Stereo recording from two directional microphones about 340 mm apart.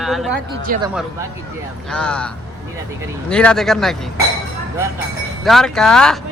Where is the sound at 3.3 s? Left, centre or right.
Centre.